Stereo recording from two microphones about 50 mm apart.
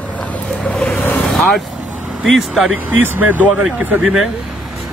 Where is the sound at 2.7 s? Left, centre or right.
Right.